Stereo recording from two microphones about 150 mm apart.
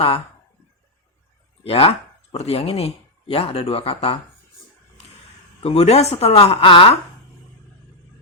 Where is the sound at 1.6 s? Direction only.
40° left (ahead or behind).